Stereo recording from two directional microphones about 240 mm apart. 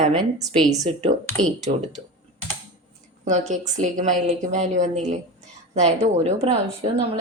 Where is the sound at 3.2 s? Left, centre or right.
Right.